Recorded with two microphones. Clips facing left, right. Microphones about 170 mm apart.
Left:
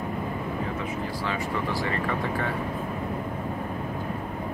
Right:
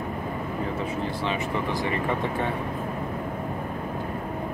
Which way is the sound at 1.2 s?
20° right (ahead or behind).